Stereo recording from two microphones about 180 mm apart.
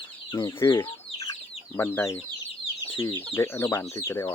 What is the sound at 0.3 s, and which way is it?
Speech, 20° left (ahead or behind).